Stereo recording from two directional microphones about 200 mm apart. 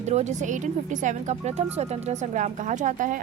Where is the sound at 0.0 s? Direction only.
35° right (ahead or behind).